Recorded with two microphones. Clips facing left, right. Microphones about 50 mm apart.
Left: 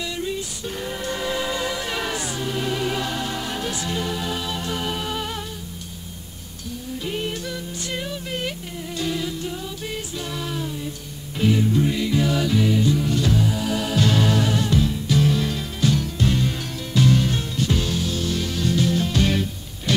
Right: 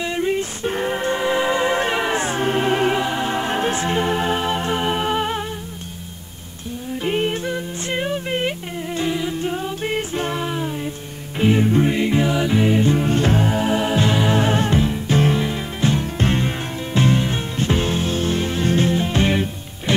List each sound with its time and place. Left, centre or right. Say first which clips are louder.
0.0 s music: right 7 dB; right
3.0 s music: right 5 dB; right
7.0 s music: right 7 dB; right
9.3 s music: right 6 dB; right